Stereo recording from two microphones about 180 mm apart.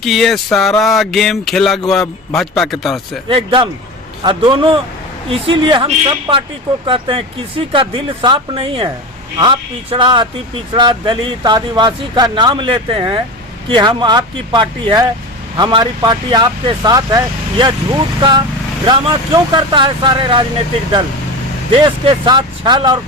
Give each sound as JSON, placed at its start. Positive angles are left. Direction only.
{"t": 0.0, "sound": "speech", "side_deg": 0}
{"t": 3.2, "sound": "speech", "side_deg": -30}
{"t": 22.0, "sound": "speech", "side_deg": -25}